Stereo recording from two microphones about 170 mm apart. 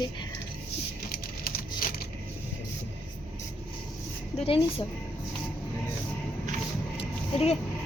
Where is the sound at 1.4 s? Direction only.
60° left (ahead or behind).